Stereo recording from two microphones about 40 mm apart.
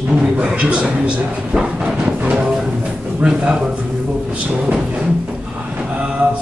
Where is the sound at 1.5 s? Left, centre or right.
Right.